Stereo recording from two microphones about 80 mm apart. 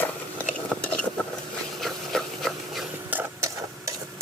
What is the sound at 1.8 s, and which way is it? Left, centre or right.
Rub, centre.